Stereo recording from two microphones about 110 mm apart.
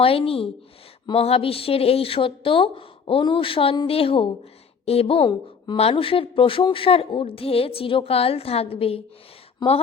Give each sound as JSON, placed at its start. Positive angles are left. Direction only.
{"t": 0.0, "sound": "speech", "side_deg": 60}
{"t": 5.7, "sound": "speech", "side_deg": 60}
{"t": 9.6, "sound": "speech", "side_deg": 45}